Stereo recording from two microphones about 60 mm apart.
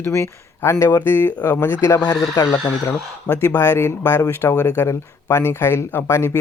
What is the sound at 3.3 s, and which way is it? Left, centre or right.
Speech, left.